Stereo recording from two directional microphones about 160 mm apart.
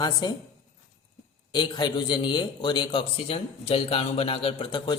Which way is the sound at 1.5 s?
30° left (ahead or behind).